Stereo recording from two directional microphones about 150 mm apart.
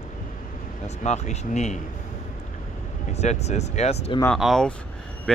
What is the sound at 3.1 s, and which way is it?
Speech, 50° left (ahead or behind).